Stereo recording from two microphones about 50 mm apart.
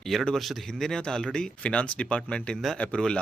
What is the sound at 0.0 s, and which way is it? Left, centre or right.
Speech, centre.